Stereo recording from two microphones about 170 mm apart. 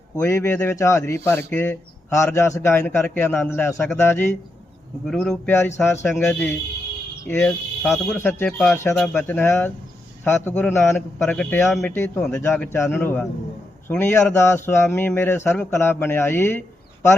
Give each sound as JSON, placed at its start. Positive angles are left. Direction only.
{"t": 0.2, "sound": "speech", "side_deg": 15}
{"t": 5.0, "sound": "speech", "side_deg": 0}
{"t": 7.3, "sound": "speech", "side_deg": 10}
{"t": 11.9, "sound": "speech", "side_deg": 10}